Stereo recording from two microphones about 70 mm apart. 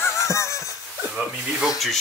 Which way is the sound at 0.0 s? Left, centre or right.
Left.